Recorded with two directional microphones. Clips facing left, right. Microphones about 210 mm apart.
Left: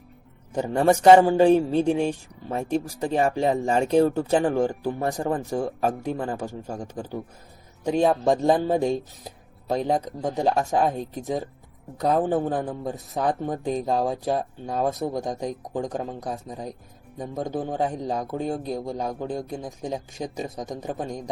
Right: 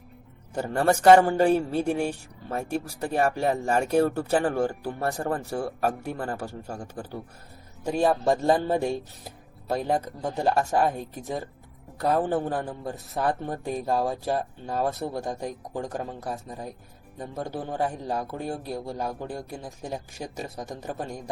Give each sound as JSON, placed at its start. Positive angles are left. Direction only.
{"t": 0.5, "sound": "speech", "side_deg": 15}